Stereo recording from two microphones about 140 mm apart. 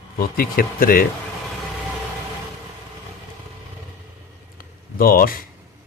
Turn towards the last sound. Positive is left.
turn(degrees=90)